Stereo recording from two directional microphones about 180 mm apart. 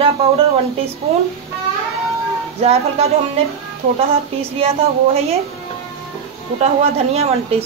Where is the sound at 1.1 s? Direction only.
35° right (ahead or behind).